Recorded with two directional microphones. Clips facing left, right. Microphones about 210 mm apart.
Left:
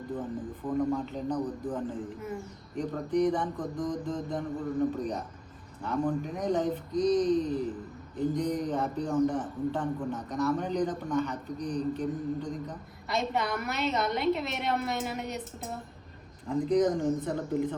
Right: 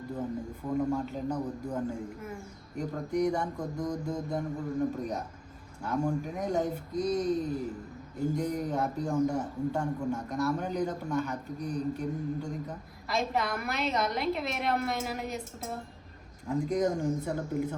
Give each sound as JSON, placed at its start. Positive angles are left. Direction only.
{"t": 0.2, "sound": "a man's voice", "side_deg": -10}
{"t": 5.8, "sound": "a man's voice", "side_deg": -10}